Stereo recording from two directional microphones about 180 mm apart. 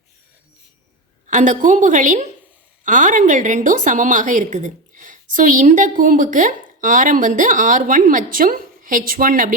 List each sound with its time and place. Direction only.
1.3 s a woman's voice: 45° right (ahead or behind)